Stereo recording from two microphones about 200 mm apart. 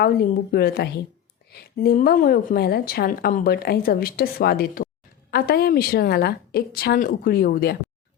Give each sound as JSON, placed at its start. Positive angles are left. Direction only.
{"t": 0.0, "sound": "a woman's voice", "side_deg": 50}